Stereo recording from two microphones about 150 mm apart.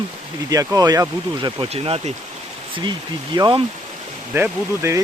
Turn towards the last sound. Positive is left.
turn(degrees=-15)  # may be behind; listen again after turning